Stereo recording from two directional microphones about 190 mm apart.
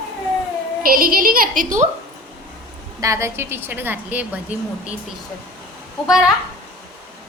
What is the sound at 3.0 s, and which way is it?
A woman's voice, 15° right (ahead or behind).